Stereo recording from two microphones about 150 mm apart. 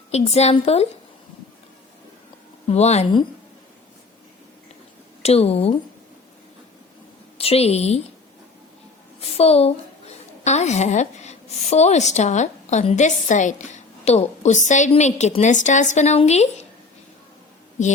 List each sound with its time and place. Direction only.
0.1 s a woman's voice: 45° left (ahead or behind)
2.6 s a woman's voice: 45° left (ahead or behind)
5.2 s a woman's voice: 45° left (ahead or behind)
7.3 s a woman's voice: 40° left (ahead or behind)
9.4 s a woman's voice: 45° left (ahead or behind)